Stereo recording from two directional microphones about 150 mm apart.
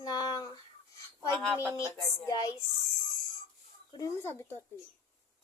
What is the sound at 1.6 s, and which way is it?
Speech, 20° left (ahead or behind).